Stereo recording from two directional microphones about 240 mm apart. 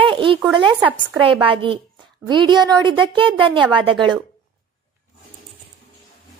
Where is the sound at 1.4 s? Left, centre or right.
Right.